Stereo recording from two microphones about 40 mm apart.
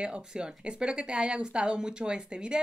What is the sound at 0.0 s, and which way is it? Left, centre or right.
Speech, right.